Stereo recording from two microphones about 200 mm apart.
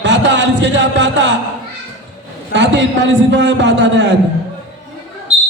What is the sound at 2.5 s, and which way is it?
A man's voice, 65° right (ahead or behind).